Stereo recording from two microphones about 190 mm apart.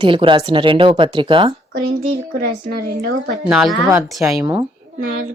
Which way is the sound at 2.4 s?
55° right (ahead or behind).